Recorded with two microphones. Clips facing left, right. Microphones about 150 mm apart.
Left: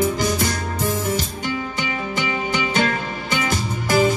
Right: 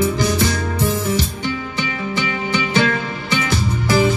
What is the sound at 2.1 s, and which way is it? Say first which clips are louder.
Music: right 3 dB; 45° left (ahead or behind).